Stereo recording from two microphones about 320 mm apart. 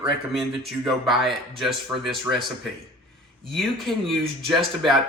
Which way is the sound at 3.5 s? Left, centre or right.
Centre.